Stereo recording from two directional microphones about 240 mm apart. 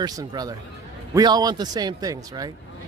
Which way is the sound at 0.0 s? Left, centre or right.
Centre.